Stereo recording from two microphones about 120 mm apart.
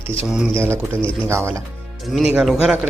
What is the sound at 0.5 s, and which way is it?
A man's voice, 20° right (ahead or behind).